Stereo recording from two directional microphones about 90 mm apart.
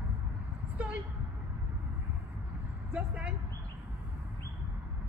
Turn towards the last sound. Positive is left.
turn(degrees=-10)  # may be behind; listen again after turning